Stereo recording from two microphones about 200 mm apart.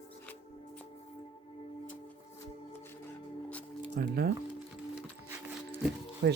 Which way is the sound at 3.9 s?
45° right (ahead or behind).